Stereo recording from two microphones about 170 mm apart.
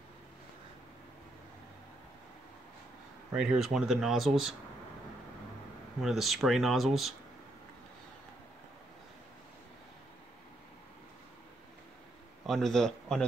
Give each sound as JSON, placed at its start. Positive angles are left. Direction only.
{"t": 3.3, "sound": "speech", "side_deg": -5}
{"t": 6.0, "sound": "speech", "side_deg": 0}
{"t": 12.4, "sound": "a man's voice", "side_deg": 0}